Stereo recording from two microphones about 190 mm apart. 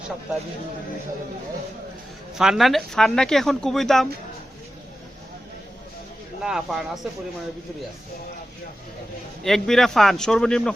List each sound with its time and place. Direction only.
2.4 s speech: centre (ahead or behind)
6.4 s speech: centre (ahead or behind)
9.4 s speech: centre (ahead or behind)